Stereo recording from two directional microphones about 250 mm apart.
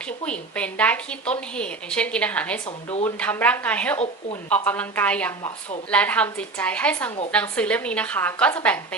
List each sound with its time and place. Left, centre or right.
0.3 s a woman's voice: centre
3.9 s speech: left
4.4 s a woman's voice: centre